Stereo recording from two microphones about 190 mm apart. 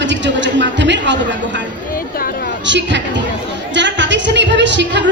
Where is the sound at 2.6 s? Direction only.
70° right (ahead or behind).